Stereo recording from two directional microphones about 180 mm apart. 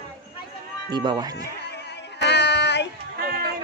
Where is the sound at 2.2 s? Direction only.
70° left (ahead or behind).